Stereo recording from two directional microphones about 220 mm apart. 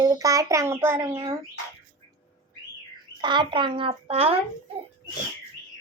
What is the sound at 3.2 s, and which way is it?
Speech, 20° right (ahead or behind).